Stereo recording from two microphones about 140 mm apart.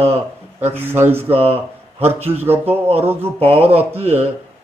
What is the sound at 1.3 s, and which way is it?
Speech, 45° right (ahead or behind).